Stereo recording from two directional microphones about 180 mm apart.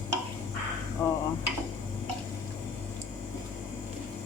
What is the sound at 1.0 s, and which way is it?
Speech, 20° left (ahead or behind).